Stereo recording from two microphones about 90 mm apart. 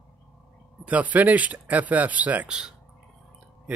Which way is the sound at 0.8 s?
15° right (ahead or behind).